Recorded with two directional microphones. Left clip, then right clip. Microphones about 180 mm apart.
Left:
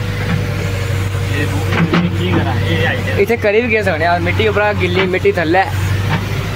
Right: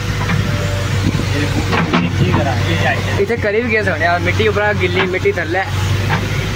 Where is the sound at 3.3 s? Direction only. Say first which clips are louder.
Left 4 dB; 10° left (ahead or behind); by 5.7 s 25° left (ahead or behind).